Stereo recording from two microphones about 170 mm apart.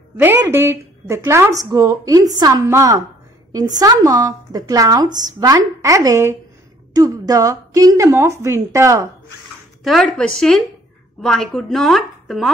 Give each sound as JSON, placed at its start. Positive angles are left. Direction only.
{"t": 0.2, "sound": "a woman's voice", "side_deg": -15}
{"t": 9.8, "sound": "speech", "side_deg": 0}